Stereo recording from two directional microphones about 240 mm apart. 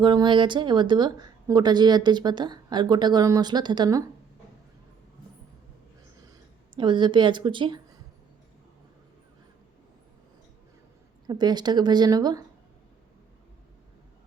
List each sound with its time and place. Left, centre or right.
0.0 s a woman's voice: centre
6.7 s a woman's voice: centre
11.3 s a woman's voice: centre